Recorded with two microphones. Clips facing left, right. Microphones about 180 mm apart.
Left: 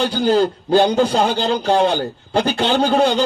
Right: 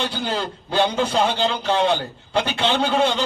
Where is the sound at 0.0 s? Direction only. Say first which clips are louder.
Left 9 dB; 40° left (ahead or behind).